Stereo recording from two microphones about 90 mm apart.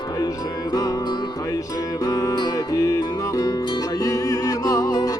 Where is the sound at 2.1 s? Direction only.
45° left (ahead or behind).